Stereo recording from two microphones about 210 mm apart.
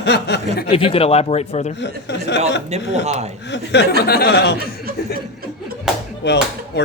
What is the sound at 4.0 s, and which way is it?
Speech, 50° left (ahead or behind).